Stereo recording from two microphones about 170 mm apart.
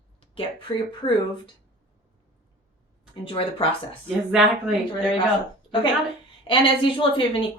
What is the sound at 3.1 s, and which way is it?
Speech, 30° left (ahead or behind).